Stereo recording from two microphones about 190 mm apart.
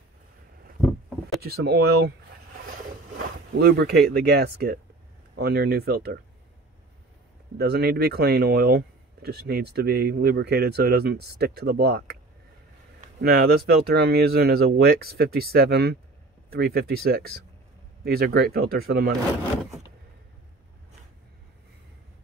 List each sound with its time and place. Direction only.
1.4 s speech: 60° right (ahead or behind)
3.5 s speech: 55° right (ahead or behind)
7.5 s speech: 55° right (ahead or behind)
13.2 s speech: 55° right (ahead or behind)